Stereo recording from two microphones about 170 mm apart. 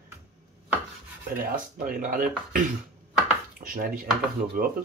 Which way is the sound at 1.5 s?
55° right (ahead or behind).